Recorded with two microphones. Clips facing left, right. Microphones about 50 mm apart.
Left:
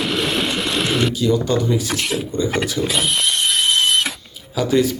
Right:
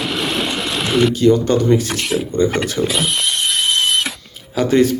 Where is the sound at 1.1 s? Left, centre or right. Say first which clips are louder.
Right 5 dB; right.